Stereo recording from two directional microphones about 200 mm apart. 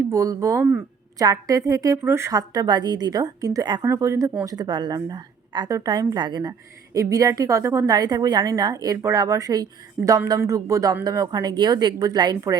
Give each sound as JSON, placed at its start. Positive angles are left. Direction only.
{"t": 0.1, "sound": "a woman's voice", "side_deg": -15}